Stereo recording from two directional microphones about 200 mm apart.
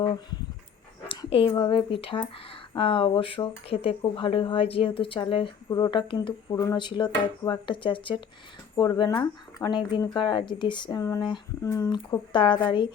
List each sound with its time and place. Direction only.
1.2 s a woman's voice: 25° left (ahead or behind)